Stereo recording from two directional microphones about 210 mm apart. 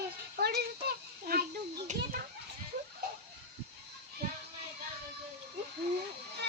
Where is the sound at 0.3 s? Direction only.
45° right (ahead or behind).